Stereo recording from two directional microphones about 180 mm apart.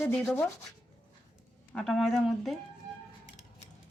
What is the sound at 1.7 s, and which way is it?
Speech, 5° left (ahead or behind).